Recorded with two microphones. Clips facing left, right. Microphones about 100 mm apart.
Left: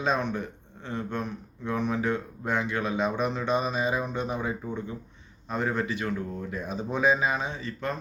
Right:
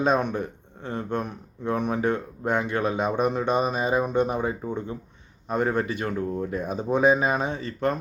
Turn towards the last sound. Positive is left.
turn(degrees=-55)  # may be behind; listen again after turning